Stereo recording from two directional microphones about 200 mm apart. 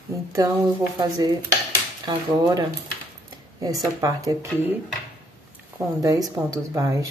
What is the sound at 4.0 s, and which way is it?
Speech, 15° right (ahead or behind).